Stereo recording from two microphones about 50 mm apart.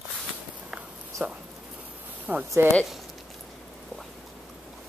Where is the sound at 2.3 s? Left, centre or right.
Right.